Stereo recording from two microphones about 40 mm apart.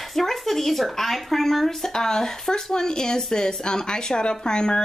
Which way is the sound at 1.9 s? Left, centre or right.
Centre.